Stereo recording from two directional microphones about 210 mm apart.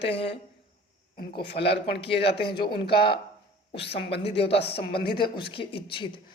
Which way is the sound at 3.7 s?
55° left (ahead or behind).